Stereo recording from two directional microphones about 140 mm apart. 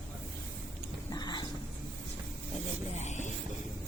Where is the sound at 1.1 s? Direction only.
30° left (ahead or behind).